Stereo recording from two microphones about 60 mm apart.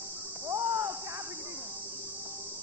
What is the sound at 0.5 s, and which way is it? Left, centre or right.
Cricket, right.